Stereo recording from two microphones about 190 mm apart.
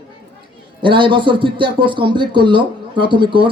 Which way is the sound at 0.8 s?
25° right (ahead or behind).